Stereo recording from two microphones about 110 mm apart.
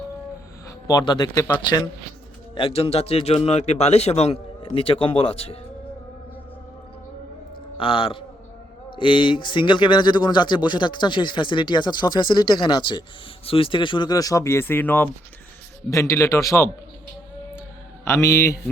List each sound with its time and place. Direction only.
0.9 s a man's voice: 35° left (ahead or behind)
2.6 s a man's voice: 60° left (ahead or behind)
7.8 s speech: 50° left (ahead or behind); by 15.1 s 15° left (ahead or behind)
15.9 s a man's voice: 30° left (ahead or behind)
18.0 s a man's voice: 25° left (ahead or behind)